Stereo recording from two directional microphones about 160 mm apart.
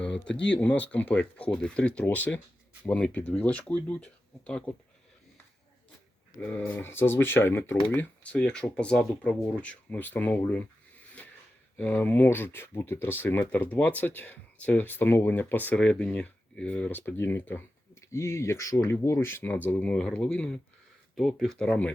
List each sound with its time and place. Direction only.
0.5 s speech: 10° left (ahead or behind)
6.4 s speech: 10° left (ahead or behind)
11.2 s a sound: 5° left (ahead or behind)
11.8 s speech: 10° left (ahead or behind)